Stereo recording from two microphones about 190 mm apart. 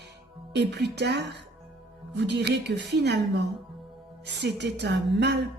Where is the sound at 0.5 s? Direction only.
60° right (ahead or behind).